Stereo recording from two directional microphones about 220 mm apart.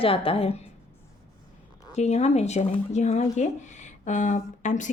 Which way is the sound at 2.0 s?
30° left (ahead or behind).